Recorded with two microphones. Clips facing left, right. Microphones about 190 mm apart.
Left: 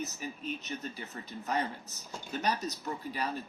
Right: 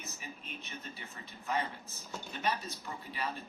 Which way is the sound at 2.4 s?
40° left (ahead or behind).